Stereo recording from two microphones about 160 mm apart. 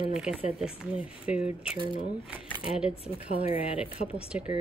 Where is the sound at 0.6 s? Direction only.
5° right (ahead or behind).